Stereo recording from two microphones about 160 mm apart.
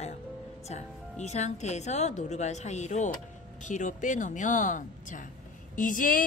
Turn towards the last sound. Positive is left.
turn(degrees=60)  # may be behind; listen again after turning